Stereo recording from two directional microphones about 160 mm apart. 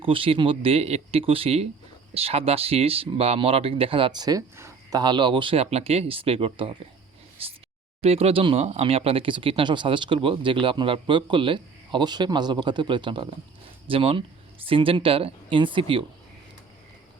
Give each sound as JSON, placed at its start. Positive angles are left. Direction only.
{"t": 0.0, "sound": "speech", "side_deg": -35}